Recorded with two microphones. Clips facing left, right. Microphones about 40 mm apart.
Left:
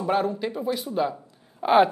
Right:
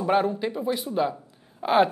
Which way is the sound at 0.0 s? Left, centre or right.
Centre.